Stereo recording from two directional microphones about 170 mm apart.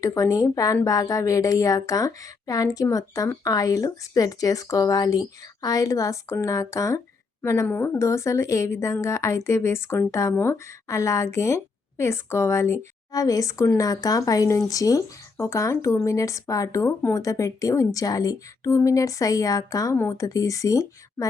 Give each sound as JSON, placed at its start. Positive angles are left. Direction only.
{"t": 0.0, "sound": "a woman's voice", "side_deg": 20}